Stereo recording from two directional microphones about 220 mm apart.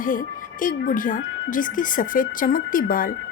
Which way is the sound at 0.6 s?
40° left (ahead or behind).